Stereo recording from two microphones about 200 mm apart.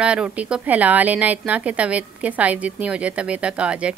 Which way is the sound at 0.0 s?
5° right (ahead or behind).